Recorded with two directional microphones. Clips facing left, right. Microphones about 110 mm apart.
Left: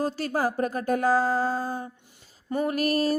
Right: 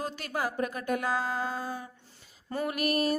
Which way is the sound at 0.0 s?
35° left (ahead or behind).